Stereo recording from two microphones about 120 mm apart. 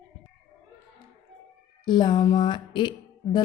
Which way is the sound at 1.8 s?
40° left (ahead or behind).